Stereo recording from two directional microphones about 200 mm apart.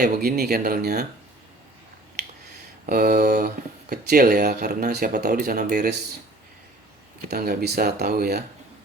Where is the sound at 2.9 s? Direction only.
50° right (ahead or behind).